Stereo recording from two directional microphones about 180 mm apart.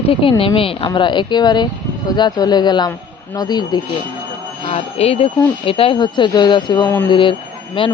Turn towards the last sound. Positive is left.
turn(degrees=30)  # may be behind; listen again after turning